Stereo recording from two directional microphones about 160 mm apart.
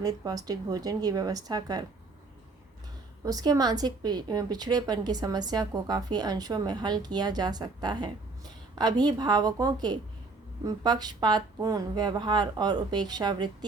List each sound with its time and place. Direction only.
0.0 s a woman's voice: 25° right (ahead or behind)
3.2 s a woman's voice: 25° right (ahead or behind)